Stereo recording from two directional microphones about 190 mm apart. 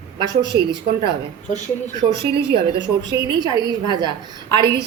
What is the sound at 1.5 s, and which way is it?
Speech, 40° left (ahead or behind).